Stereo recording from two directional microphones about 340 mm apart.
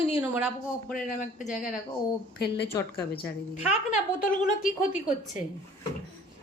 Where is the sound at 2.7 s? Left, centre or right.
Centre.